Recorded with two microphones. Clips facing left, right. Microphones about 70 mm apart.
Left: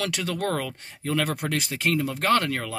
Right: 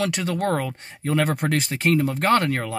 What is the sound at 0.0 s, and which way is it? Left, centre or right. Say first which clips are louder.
Speech: right 4 dB; right.